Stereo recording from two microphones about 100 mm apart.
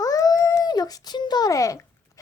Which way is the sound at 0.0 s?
35° left (ahead or behind).